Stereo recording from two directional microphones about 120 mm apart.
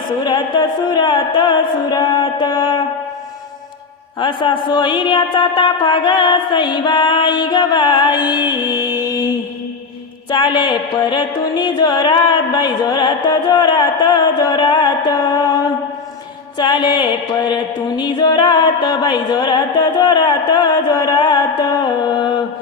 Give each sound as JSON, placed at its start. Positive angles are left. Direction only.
{"t": 0.3, "sound": "music", "side_deg": 40}
{"t": 4.2, "sound": "music", "side_deg": 40}